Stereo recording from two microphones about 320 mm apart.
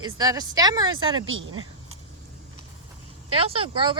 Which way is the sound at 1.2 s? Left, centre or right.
Right.